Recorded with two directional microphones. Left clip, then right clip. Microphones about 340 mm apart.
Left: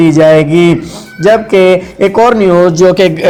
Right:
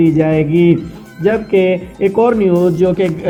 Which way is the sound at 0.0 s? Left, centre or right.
Left.